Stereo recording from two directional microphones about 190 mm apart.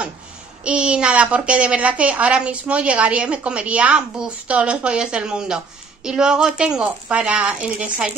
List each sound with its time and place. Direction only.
0.7 s a woman's voice: 5° right (ahead or behind)